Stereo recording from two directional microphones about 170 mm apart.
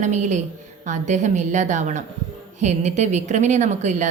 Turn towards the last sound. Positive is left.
turn(degrees=-45)  # may be behind; listen again after turning